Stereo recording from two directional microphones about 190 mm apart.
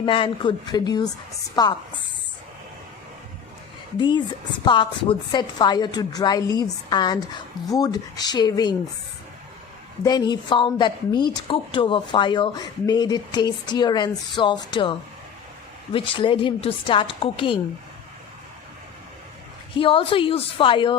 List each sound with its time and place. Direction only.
0.0 s a woman's voice: 25° left (ahead or behind)
3.9 s a woman's voice: 25° left (ahead or behind)
10.0 s a woman's voice: 20° left (ahead or behind)
19.7 s a woman's voice: 30° left (ahead or behind)